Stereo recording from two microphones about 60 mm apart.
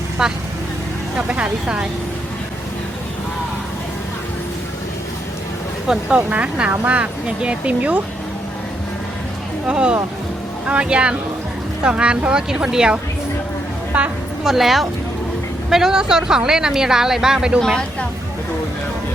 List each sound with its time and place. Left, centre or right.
0.2 s speech: centre
1.1 s speech: centre
5.9 s speech: centre
9.6 s speech: centre
13.9 s speech: right
14.4 s speech: centre